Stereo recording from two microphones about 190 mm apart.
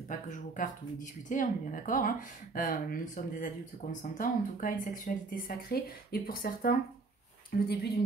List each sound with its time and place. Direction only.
0.1 s speech: 40° left (ahead or behind)